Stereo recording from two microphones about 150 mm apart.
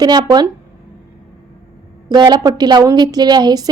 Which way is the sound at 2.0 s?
30° right (ahead or behind).